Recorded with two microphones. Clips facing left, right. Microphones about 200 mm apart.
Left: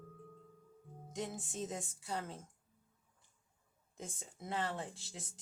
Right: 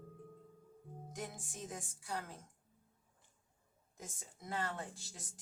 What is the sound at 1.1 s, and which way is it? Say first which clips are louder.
Speech: left 5 dB; 25° left (ahead or behind).